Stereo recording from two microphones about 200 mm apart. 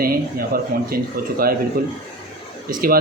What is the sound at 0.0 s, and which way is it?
Speech, 45° right (ahead or behind).